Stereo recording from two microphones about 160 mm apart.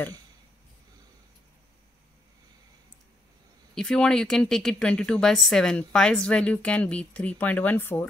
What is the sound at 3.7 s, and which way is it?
Speech, 5° left (ahead or behind).